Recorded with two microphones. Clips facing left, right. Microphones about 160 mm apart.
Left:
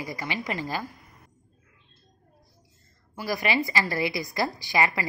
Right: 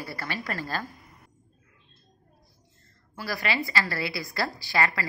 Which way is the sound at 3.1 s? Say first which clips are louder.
Left 3 dB; 15° left (ahead or behind).